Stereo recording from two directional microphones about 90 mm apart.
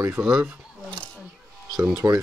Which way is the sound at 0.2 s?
5° right (ahead or behind).